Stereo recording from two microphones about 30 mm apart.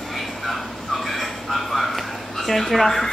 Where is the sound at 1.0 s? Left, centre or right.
Centre.